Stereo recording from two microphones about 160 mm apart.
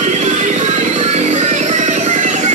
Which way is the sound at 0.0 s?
50° right (ahead or behind).